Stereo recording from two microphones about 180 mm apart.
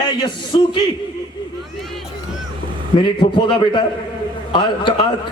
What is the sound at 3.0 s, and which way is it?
A man's voice, 25° left (ahead or behind).